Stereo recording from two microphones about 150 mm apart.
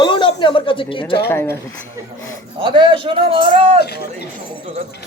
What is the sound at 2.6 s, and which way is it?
Speech, 30° right (ahead or behind).